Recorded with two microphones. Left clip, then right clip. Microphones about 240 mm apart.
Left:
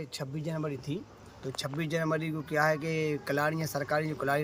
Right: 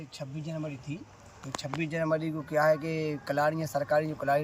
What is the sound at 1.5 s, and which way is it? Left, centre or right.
Speech, left.